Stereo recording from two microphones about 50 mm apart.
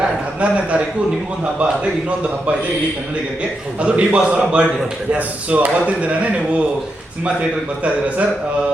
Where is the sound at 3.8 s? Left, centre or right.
Right.